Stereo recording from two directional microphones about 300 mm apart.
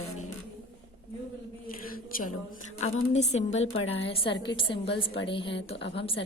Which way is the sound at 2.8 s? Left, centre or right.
Left.